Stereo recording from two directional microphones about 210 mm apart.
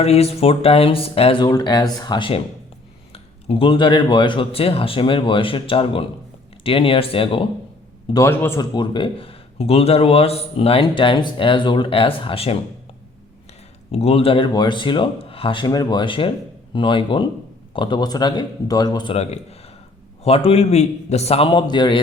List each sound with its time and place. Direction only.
0.0 s speech: 30° left (ahead or behind)
8.1 s speech: 10° left (ahead or behind)
13.9 s speech: 30° left (ahead or behind)